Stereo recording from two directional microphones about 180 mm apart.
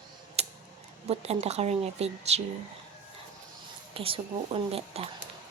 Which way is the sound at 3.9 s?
30° right (ahead or behind).